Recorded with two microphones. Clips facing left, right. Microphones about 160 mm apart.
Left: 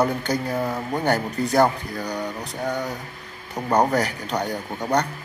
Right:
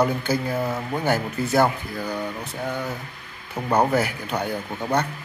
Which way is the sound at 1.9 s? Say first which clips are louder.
Even; 15° left (ahead or behind).